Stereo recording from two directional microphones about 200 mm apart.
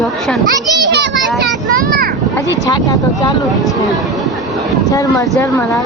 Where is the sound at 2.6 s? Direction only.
15° left (ahead or behind).